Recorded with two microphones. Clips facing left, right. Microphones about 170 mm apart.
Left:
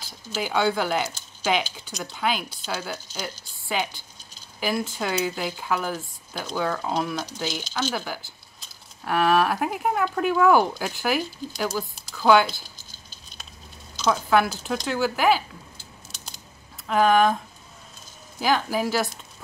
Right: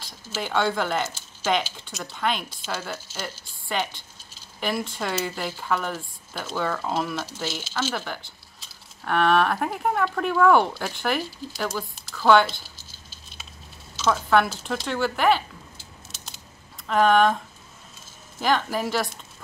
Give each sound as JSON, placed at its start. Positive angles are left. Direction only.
{"t": 0.0, "sound": "speech", "side_deg": 5}
{"t": 18.4, "sound": "speech", "side_deg": 0}